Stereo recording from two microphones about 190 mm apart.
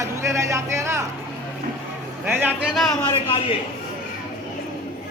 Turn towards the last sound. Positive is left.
turn(degrees=25)  # may be behind; listen again after turning